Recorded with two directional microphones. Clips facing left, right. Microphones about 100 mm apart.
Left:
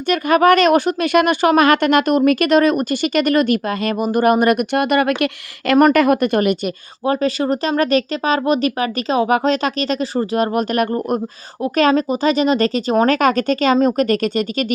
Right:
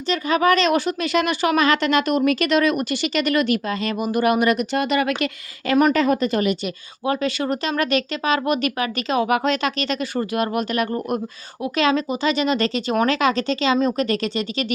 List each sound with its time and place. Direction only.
0.1 s speech: 55° left (ahead or behind)
5.6 s speech: 65° left (ahead or behind)
7.0 s speech: 35° left (ahead or behind)